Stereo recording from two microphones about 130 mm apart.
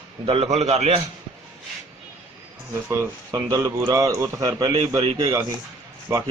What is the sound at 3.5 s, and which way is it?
Speech, 30° right (ahead or behind).